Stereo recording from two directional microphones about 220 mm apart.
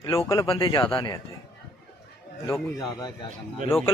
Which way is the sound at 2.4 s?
15° left (ahead or behind).